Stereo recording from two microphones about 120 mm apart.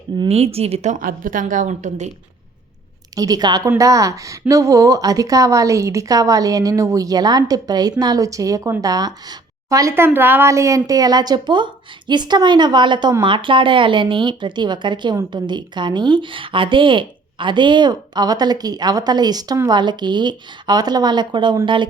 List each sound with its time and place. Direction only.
0.3 s a woman's voice: 60° right (ahead or behind); by 2.0 s 85° right
3.2 s a woman's voice: 30° right (ahead or behind)